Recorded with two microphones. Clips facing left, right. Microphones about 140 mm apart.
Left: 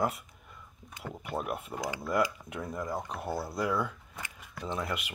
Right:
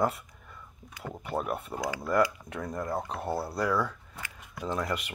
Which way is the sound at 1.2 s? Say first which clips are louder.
Right 3 dB; centre (ahead or behind).